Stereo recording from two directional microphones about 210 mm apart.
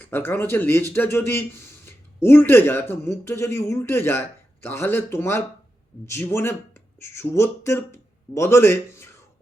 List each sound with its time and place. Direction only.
0.0 s speech: 10° left (ahead or behind)